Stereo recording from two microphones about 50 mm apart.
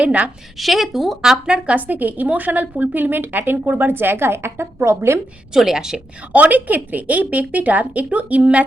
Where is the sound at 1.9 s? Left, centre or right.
Right.